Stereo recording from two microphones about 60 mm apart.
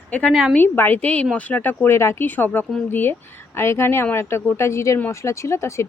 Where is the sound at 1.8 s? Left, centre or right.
Left.